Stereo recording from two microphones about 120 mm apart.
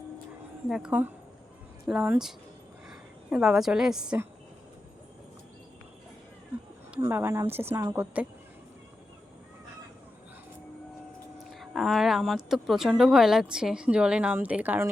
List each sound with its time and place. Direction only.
0.7 s a woman's voice: 10° right (ahead or behind)
7.1 s a woman's voice: 20° right (ahead or behind)
11.3 s speech: centre (ahead or behind)